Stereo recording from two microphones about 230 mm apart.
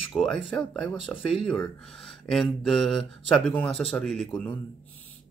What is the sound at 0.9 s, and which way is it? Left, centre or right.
Speech, left.